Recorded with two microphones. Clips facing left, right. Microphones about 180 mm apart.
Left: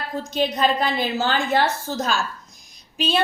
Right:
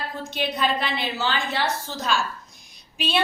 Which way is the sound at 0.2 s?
40° left (ahead or behind).